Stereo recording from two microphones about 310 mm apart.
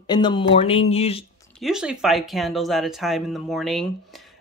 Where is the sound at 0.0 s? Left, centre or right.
Centre.